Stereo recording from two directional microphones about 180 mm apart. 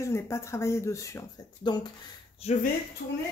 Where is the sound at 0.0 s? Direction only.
15° left (ahead or behind).